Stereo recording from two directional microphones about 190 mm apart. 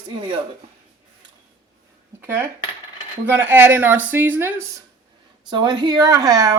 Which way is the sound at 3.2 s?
10° right (ahead or behind).